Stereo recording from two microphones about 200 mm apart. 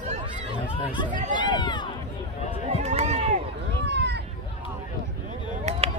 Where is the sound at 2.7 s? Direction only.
35° right (ahead or behind).